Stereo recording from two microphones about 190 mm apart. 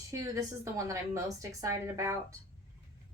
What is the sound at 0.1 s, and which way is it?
Speech, 15° right (ahead or behind).